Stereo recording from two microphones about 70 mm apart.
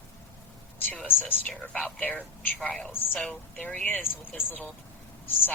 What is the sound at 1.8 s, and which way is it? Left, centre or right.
Speech, left.